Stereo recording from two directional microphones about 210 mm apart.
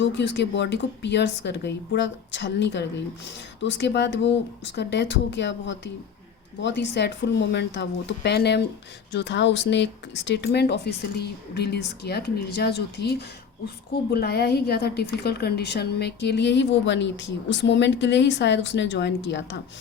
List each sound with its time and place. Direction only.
0.0 s a woman's voice: 55° left (ahead or behind)